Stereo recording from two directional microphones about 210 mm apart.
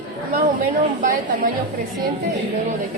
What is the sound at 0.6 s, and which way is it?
Speech, 40° right (ahead or behind).